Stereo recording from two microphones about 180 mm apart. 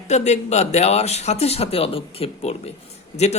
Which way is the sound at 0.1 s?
40° left (ahead or behind).